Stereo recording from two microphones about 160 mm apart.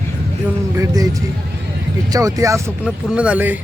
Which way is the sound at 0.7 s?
20° right (ahead or behind).